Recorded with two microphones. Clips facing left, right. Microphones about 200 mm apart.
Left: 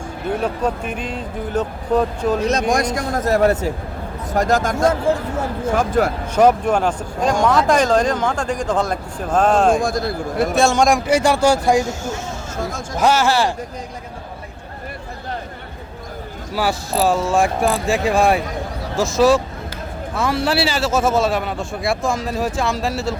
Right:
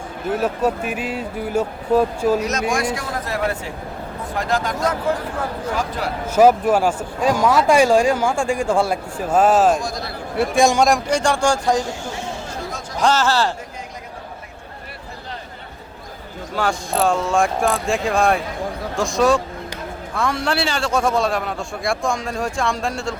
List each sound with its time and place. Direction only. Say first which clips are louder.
0.3 s speech: right 2 dB; 5° right (ahead or behind)
2.4 s a man's voice: left 3 dB; 30° left (ahead or behind)
4.9 s speech: left 3 dB; 25° left (ahead or behind)
5.7 s a man's voice: left 10 dB; 50° left (ahead or behind)
6.2 s speech: right 4 dB; 5° right (ahead or behind)
9.7 s a man's voice: left 6 dB; 50° left (ahead or behind)
10.5 s speech: right 1 dB; 15° right (ahead or behind)
10.8 s speech: left 2 dB; centre (ahead or behind)
11.9 s a man's voice: left 3 dB; 45° left (ahead or behind)
13.0 s speech: left 2 dB; 10° left (ahead or behind)
16.6 s a man's voice: left 1 dB; 5° left (ahead or behind)